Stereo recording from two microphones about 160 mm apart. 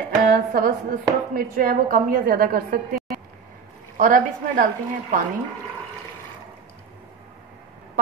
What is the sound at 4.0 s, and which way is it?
Speech, 55° right (ahead or behind).